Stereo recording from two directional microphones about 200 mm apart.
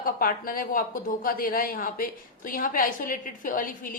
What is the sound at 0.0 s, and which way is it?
A woman's voice, 45° left (ahead or behind).